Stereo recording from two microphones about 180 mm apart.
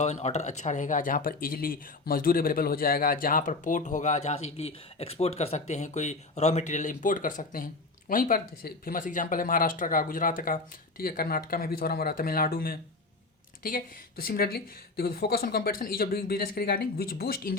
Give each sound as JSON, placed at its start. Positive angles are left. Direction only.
{"t": 0.0, "sound": "speech", "side_deg": 35}